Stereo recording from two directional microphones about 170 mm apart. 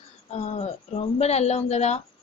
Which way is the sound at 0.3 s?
40° left (ahead or behind).